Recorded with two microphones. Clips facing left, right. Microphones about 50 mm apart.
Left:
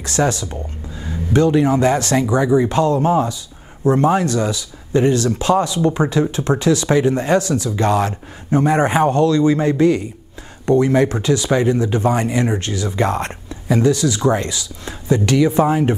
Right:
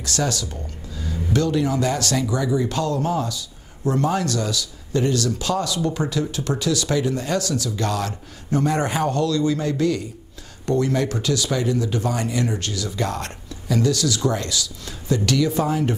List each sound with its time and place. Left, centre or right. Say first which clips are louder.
0.0 s speech: left 6 dB; left